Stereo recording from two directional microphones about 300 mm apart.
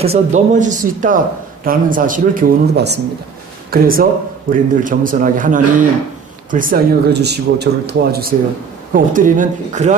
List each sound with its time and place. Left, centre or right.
0.0 s a man's voice: right